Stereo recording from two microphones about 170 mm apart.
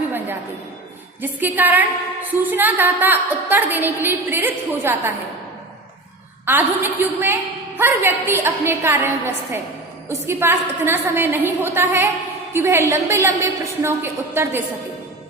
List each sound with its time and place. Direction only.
1.2 s a woman's voice: 10° right (ahead or behind)
6.4 s a woman's voice: 10° right (ahead or behind)